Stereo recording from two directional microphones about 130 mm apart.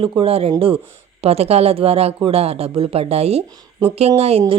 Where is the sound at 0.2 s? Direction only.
50° right (ahead or behind).